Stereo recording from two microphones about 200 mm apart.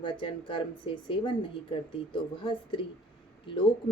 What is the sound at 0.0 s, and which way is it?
A woman's voice, 25° left (ahead or behind).